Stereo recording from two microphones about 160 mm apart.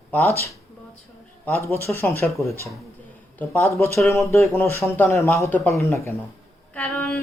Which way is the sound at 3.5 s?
15° left (ahead or behind).